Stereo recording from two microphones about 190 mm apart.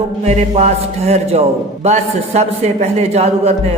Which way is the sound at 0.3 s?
35° right (ahead or behind).